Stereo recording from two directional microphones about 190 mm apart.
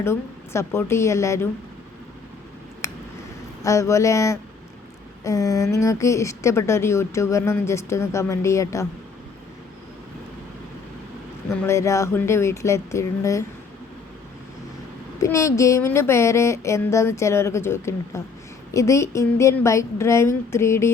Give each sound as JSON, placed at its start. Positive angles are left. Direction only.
{"t": 0.0, "sound": "a woman's voice", "side_deg": 15}
{"t": 2.8, "sound": "a sound", "side_deg": 15}
{"t": 3.6, "sound": "a woman's voice", "side_deg": 15}
{"t": 11.4, "sound": "a woman's voice", "side_deg": 15}
{"t": 15.2, "sound": "a woman's voice", "side_deg": 15}